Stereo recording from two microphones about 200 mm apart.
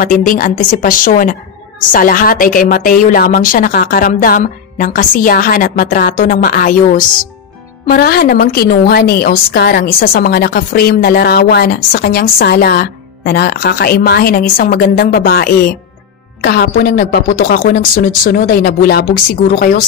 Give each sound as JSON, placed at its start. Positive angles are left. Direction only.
{"t": 0.0, "sound": "a woman's voice", "side_deg": 45}